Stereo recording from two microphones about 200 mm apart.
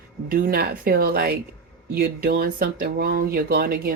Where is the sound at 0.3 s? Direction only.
45° right (ahead or behind).